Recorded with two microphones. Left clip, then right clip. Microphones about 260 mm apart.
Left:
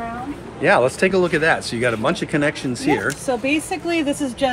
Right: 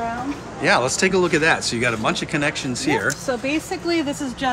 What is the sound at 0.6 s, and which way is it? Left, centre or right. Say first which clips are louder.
Speech: left 2 dB; centre.